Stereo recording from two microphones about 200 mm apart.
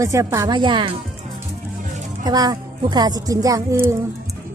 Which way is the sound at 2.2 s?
20° right (ahead or behind).